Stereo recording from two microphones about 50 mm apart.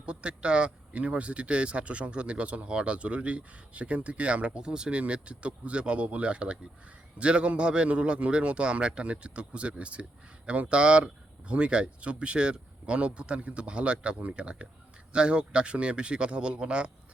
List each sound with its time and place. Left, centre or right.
0.0 s a man's voice: right